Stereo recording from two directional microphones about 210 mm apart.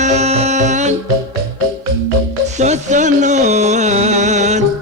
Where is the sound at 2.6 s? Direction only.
35° right (ahead or behind).